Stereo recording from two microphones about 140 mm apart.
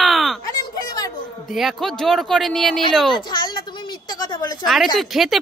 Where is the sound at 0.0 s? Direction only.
Centre (ahead or behind).